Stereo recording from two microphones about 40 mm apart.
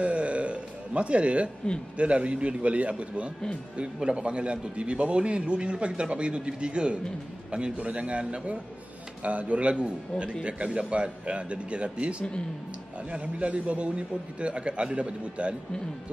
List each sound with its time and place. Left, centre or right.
0.0 s music: right
2.0 s a man's voice: right